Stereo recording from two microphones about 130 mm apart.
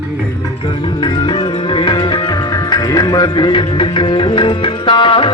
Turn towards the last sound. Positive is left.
turn(degrees=40)  # may be behind; listen again after turning